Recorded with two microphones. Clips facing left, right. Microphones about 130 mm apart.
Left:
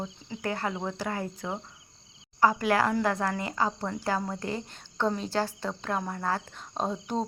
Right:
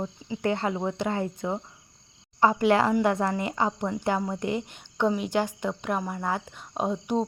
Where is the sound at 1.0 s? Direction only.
25° right (ahead or behind).